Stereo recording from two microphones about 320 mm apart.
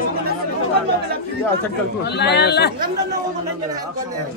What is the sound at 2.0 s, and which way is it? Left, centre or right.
Speech, left.